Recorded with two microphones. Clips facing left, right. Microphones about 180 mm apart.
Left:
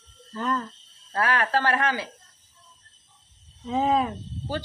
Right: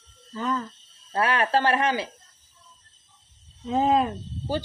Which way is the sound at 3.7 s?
Centre (ahead or behind).